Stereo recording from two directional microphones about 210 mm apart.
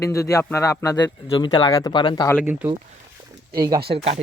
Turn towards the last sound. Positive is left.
turn(degrees=-30)  # may be behind; listen again after turning